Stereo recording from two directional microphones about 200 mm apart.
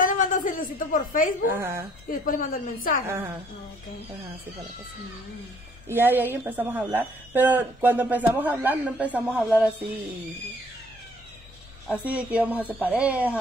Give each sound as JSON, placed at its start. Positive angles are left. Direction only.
{"t": 0.0, "sound": "a sound", "side_deg": 40}
{"t": 1.5, "sound": "a woman's voice", "side_deg": -15}
{"t": 2.0, "sound": "a woman's voice", "side_deg": 45}
{"t": 5.9, "sound": "a woman's voice", "side_deg": -10}
{"t": 11.9, "sound": "a woman's voice", "side_deg": -5}